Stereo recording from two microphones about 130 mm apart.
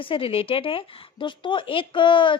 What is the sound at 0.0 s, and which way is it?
Speech, 45° left (ahead or behind).